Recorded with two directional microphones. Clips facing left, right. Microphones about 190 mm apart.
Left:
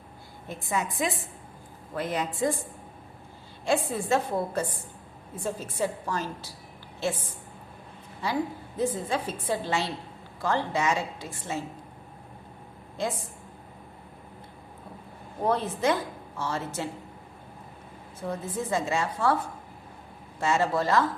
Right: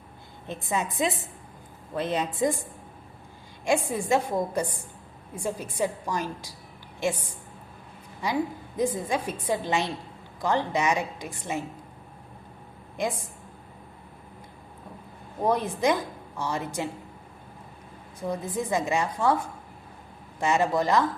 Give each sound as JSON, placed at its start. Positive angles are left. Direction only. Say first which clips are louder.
{"t": 0.4, "sound": "a woman's voice", "louder": "right 1 dB", "side_deg": -20}
{"t": 3.7, "sound": "a woman's voice", "louder": "right 1 dB", "side_deg": -15}
{"t": 13.0, "sound": "a woman's voice", "louder": "right 2 dB", "side_deg": -15}
{"t": 15.4, "sound": "a woman's voice", "louder": "right 1 dB", "side_deg": -15}
{"t": 18.2, "sound": "a woman's voice", "louder": "right 2 dB", "side_deg": -15}
{"t": 20.4, "sound": "a woman's voice", "louder": "right 1 dB", "side_deg": -15}